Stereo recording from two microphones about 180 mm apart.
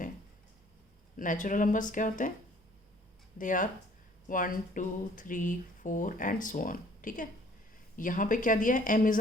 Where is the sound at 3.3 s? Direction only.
45° left (ahead or behind).